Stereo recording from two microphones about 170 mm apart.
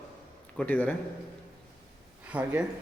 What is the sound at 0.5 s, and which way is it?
Speech, 10° left (ahead or behind).